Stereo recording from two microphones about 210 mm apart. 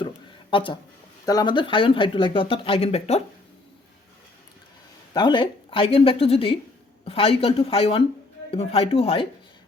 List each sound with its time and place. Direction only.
0.5 s speech: 25° left (ahead or behind)
5.1 s speech: 20° left (ahead or behind)